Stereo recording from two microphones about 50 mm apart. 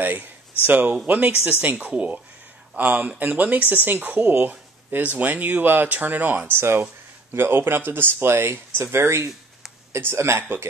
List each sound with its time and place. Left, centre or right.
0.0 s speech: right